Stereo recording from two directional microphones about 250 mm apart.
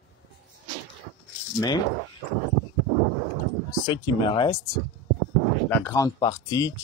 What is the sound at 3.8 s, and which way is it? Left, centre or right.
Speech, centre.